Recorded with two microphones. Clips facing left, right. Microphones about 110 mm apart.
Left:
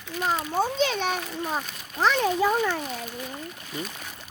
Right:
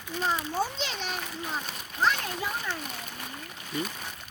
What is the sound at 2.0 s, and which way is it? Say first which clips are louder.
Speech: left 6 dB; 90° left.